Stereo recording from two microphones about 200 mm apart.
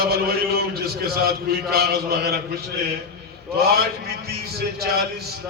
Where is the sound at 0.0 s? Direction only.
50° right (ahead or behind).